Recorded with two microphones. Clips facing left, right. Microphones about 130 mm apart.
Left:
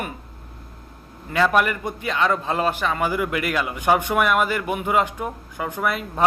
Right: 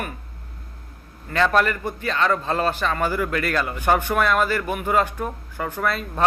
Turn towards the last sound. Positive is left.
turn(degrees=15)  # may be behind; listen again after turning